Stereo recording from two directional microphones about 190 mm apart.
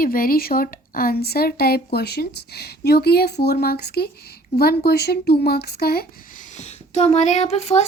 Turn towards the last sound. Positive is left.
turn(degrees=35)  # may be behind; listen again after turning